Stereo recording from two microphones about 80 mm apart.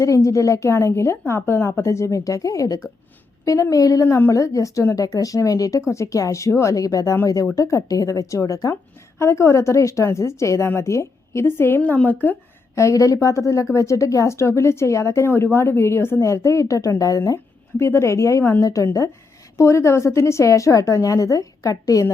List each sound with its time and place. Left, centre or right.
0.0 s a woman's voice: left
4.0 s a woman's voice: left
4.3 s a woman's voice: left
11.8 s a woman's voice: centre
12.7 s a woman's voice: left